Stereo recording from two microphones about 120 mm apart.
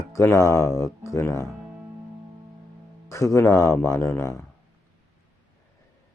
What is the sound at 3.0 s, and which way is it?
Speech, 25° left (ahead or behind).